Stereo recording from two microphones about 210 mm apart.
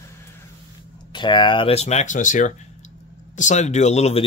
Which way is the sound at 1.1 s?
20° left (ahead or behind).